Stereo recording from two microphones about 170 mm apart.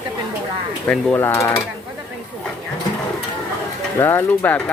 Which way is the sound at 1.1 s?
15° left (ahead or behind).